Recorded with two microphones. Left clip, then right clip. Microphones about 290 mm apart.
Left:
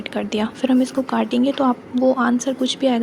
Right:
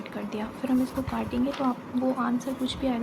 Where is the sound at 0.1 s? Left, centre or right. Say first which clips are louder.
Left 12 dB; right.